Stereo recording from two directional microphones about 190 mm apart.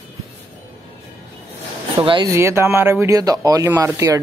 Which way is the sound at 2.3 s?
15° right (ahead or behind).